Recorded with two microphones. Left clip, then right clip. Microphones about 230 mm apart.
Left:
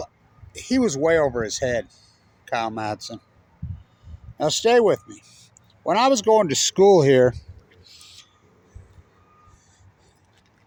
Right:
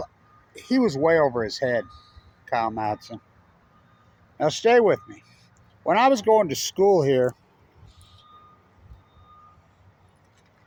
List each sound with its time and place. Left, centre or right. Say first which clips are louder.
0.5 s speech: left 1 dB; centre
4.4 s speech: left 1 dB; centre
6.3 s speech: left 2 dB; left